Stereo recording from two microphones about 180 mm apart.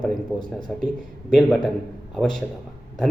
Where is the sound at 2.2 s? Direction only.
5° left (ahead or behind).